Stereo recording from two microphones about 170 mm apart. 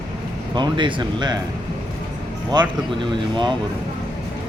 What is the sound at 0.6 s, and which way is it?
Speech, 25° right (ahead or behind).